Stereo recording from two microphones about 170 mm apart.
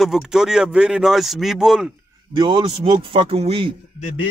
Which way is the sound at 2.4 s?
30° right (ahead or behind).